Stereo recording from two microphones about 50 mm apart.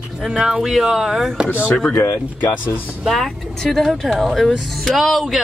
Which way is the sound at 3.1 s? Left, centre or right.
Centre.